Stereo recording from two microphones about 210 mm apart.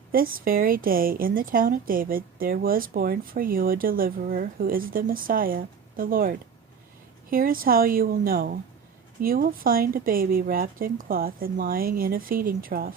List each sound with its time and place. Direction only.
0.1 s a woman's voice: 45° right (ahead or behind)